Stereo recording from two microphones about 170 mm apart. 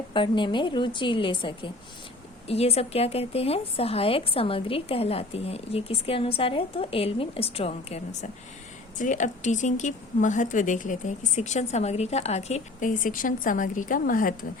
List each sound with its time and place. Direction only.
0.1 s a woman's voice: 30° left (ahead or behind); by 14.3 s 55° left (ahead or behind)